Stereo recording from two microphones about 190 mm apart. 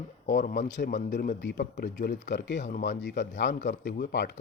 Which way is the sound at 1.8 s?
45° left (ahead or behind).